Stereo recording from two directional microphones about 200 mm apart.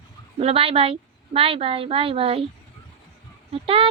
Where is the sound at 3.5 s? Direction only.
30° right (ahead or behind).